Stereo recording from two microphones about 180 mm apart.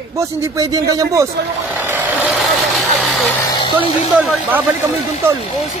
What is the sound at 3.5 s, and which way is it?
Speech, 25° left (ahead or behind).